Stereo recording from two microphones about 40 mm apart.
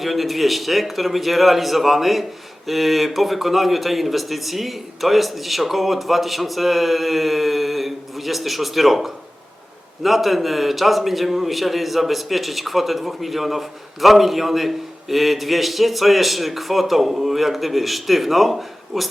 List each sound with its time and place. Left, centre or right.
0.0 s a man's voice: centre